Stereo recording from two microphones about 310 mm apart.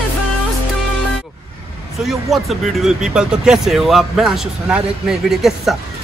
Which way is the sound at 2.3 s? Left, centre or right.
Centre.